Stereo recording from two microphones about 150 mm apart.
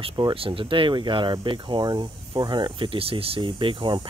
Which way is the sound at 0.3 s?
35° right (ahead or behind).